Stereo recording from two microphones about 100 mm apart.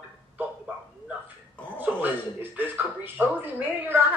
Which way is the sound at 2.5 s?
20° right (ahead or behind).